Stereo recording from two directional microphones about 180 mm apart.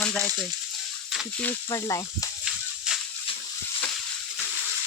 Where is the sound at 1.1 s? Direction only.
5° left (ahead or behind).